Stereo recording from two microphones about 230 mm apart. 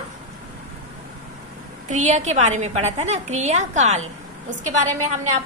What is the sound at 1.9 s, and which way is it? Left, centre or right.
A woman's voice, right.